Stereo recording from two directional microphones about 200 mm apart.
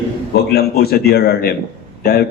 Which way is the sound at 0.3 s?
50° left (ahead or behind).